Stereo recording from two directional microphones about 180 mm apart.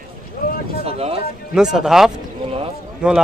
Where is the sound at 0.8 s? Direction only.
35° right (ahead or behind).